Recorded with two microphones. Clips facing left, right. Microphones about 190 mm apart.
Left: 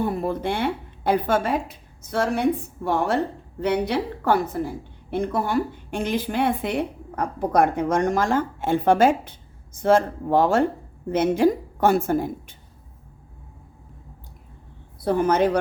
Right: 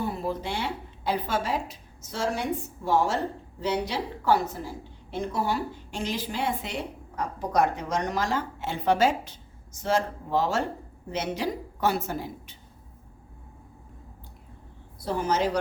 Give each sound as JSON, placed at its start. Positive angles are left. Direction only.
{"t": 0.0, "sound": "a woman's voice", "side_deg": 55}
{"t": 15.0, "sound": "a woman's voice", "side_deg": 55}